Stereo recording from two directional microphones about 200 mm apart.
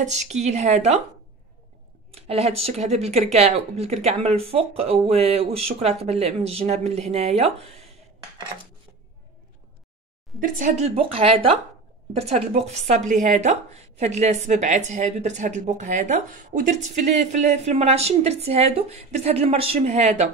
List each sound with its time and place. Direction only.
0.0 s a woman's voice: 35° right (ahead or behind)
2.1 s a woman's voice: 30° right (ahead or behind)
10.4 s a woman's voice: 35° right (ahead or behind)